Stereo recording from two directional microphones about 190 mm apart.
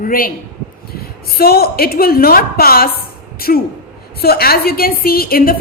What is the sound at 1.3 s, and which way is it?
A woman's voice, 55° left (ahead or behind).